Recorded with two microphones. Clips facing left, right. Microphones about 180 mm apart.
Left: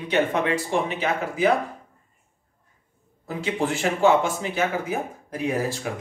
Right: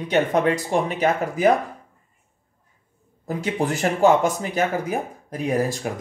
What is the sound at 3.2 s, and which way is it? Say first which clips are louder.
Speech: right 2 dB; 40° right (ahead or behind).